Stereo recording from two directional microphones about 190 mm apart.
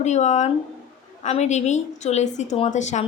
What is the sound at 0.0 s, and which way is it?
A woman's voice, 40° left (ahead or behind).